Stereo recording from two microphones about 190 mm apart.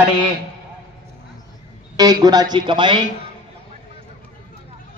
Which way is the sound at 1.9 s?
20° right (ahead or behind).